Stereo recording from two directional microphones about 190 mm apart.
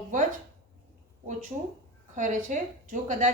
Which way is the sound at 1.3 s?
40° right (ahead or behind).